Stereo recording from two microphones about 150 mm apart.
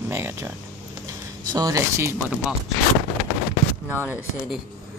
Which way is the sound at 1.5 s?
25° right (ahead or behind).